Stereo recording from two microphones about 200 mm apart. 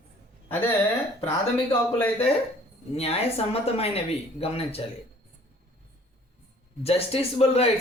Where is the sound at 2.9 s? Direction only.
30° left (ahead or behind).